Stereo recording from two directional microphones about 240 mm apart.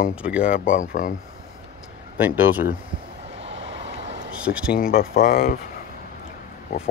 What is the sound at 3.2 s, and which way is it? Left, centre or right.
Vehicle, right.